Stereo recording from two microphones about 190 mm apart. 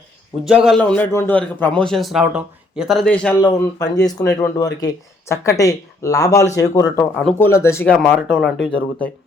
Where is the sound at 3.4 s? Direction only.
20° left (ahead or behind).